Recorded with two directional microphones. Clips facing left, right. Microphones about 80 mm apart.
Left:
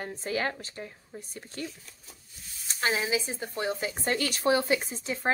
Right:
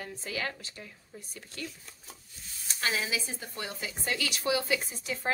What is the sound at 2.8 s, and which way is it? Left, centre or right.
A woman's voice, left.